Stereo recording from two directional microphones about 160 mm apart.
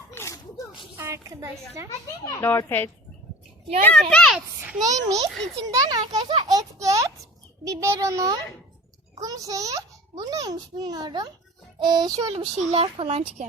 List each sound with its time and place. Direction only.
0.1 s a sound: 15° left (ahead or behind)
0.9 s a sound: 15° right (ahead or behind)
2.2 s a child's voice: 15° left (ahead or behind)
4.1 s a child's voice: 5° left (ahead or behind)
4.4 s a child's voice: 10° right (ahead or behind)
4.8 s a child's voice: 20° right (ahead or behind)